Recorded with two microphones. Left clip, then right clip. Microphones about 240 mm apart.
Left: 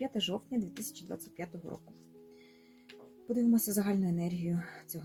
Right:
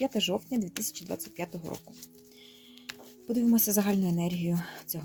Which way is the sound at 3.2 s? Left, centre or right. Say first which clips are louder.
Right 3 dB; right.